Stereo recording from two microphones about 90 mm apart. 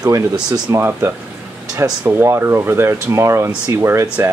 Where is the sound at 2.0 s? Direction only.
25° right (ahead or behind).